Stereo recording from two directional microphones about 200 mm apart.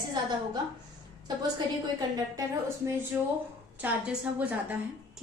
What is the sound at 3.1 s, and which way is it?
A woman's voice, 10° right (ahead or behind).